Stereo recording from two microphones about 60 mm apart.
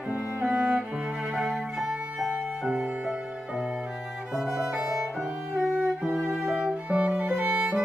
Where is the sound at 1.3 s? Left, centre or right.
Centre.